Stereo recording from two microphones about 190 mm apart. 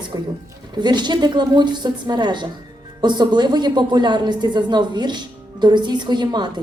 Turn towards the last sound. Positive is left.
turn(degrees=-25)  # may be behind; listen again after turning